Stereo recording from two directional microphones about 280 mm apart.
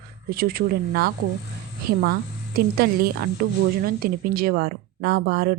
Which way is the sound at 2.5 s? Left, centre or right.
Right.